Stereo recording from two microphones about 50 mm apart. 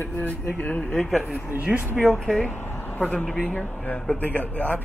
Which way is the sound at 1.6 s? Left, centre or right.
Right.